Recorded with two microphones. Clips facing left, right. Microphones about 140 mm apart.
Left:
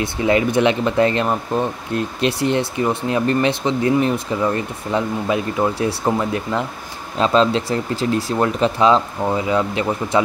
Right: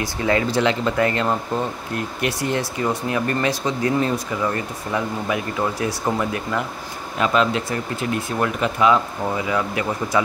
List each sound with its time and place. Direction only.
0.0 s speech: 20° left (ahead or behind)